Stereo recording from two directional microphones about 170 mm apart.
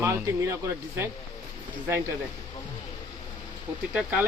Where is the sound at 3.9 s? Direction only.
5° right (ahead or behind).